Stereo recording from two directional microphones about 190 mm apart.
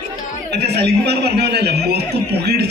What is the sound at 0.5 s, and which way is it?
A man's voice, 60° right (ahead or behind).